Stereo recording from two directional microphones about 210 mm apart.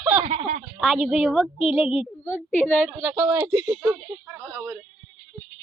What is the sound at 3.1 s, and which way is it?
Speech, 20° right (ahead or behind).